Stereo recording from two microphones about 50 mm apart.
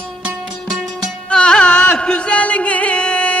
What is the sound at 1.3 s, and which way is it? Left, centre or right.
Music, centre.